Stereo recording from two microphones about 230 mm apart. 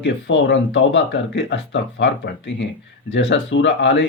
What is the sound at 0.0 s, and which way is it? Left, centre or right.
Speech, left.